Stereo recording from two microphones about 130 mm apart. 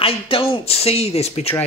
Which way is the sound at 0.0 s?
45° left (ahead or behind).